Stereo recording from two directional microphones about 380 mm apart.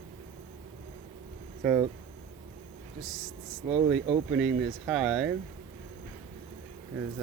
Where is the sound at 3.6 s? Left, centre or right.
Centre.